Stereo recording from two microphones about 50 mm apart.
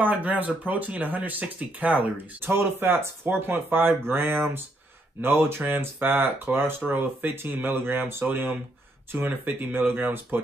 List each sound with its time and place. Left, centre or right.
0.0 s speech: right
2.4 s speech: right
6.0 s speech: right